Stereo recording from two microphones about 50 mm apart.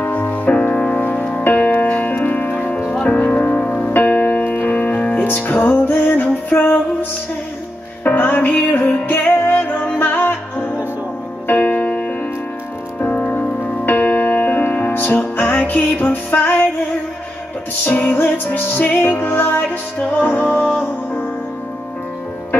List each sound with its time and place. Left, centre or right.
0.0 s music: left
17.8 s music: left